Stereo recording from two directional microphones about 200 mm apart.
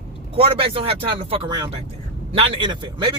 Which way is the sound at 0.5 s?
25° right (ahead or behind).